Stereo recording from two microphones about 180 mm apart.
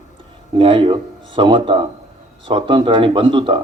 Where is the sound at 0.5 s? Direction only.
25° right (ahead or behind).